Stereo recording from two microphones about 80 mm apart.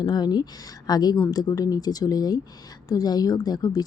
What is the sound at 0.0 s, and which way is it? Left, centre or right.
A woman's voice, left.